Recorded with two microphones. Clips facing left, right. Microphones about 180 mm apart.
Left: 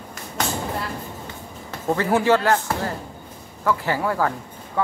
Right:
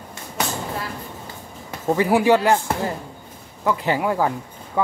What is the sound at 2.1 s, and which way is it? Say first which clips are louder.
Speech: right 1 dB; 15° right (ahead or behind).